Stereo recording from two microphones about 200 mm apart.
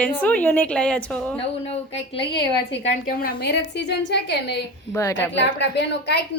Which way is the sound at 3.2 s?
50° left (ahead or behind).